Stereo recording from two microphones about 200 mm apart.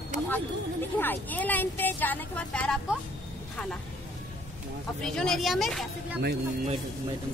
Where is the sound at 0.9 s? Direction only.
10° left (ahead or behind).